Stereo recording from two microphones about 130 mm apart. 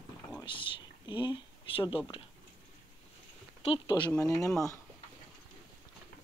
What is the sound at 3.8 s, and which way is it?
Speech, 35° left (ahead or behind).